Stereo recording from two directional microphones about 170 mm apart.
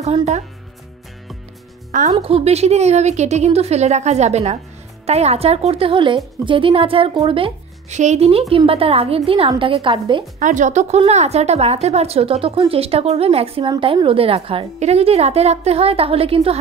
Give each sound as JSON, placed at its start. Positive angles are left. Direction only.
{"t": 0.0, "sound": "a woman's voice", "side_deg": -40}
{"t": 1.9, "sound": "a woman's voice", "side_deg": -50}
{"t": 2.1, "sound": "a woman's voice", "side_deg": -35}
{"t": 10.4, "sound": "a woman's voice", "side_deg": -45}